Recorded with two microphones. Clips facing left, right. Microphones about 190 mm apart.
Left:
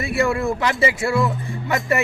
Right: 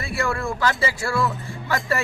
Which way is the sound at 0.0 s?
20° left (ahead or behind).